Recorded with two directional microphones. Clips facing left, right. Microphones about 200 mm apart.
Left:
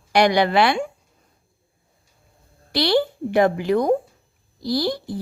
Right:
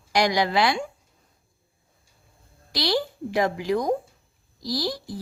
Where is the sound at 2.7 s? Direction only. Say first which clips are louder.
Left 6 dB; 60° left (ahead or behind).